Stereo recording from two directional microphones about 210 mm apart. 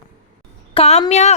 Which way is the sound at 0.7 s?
30° left (ahead or behind).